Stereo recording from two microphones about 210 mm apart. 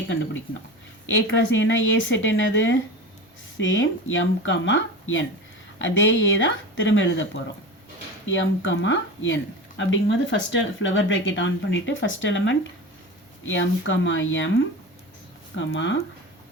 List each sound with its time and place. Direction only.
1.1 s speech: 60° left (ahead or behind)
8.3 s speech: 65° left (ahead or behind)
15.5 s speech: 60° left (ahead or behind)